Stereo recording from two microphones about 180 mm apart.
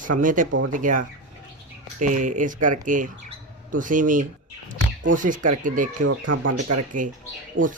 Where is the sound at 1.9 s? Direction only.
45° right (ahead or behind).